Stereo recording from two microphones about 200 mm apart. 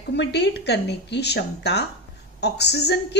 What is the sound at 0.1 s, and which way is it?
A woman's voice, 60° left (ahead or behind).